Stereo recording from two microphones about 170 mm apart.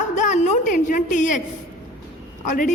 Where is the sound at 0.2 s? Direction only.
45° left (ahead or behind).